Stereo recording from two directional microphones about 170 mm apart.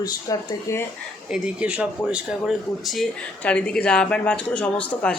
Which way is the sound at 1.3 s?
5° right (ahead or behind).